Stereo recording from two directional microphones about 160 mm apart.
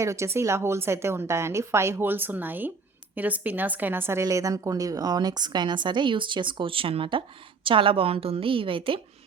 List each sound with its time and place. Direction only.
0.0 s a woman's voice: 20° right (ahead or behind); by 9.0 s 35° right (ahead or behind)